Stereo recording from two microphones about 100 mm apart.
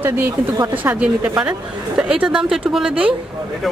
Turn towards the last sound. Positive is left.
turn(degrees=-5)  # may be behind; listen again after turning